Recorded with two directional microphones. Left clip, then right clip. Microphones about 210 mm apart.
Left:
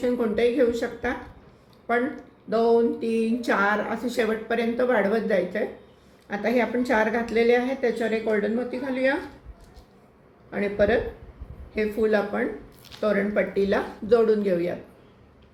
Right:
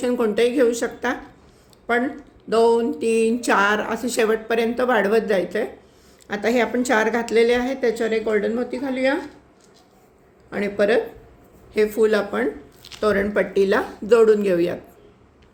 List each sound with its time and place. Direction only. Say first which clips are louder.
0.0 s speech: right 3 dB; 50° right (ahead or behind)
2.5 s speech: right 3 dB; 50° right (ahead or behind)
10.5 s speech: right 3 dB; 55° right (ahead or behind)